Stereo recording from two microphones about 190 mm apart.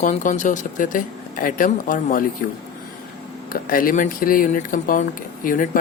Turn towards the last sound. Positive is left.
turn(degrees=45)  # may be behind; listen again after turning